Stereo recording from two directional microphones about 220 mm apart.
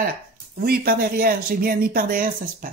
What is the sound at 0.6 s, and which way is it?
Speech, 40° right (ahead or behind).